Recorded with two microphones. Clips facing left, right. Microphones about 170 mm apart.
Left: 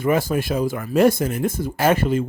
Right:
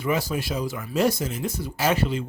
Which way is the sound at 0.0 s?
50° left (ahead or behind).